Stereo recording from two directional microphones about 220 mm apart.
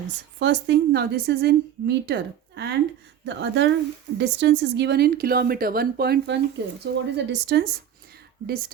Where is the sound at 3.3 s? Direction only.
55° right (ahead or behind).